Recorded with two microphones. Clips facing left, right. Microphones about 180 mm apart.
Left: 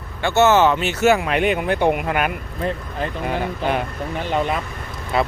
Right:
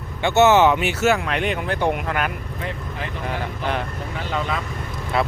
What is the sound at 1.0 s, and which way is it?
Speech, 5° left (ahead or behind).